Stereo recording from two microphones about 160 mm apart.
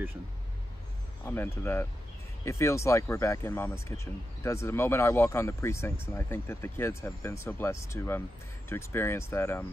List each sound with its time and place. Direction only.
1.2 s speech: 15° left (ahead or behind)